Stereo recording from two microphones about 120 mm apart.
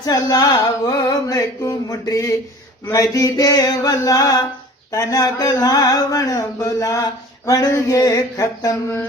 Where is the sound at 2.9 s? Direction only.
25° left (ahead or behind).